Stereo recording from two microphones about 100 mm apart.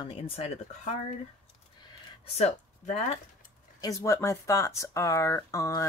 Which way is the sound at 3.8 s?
30° left (ahead or behind).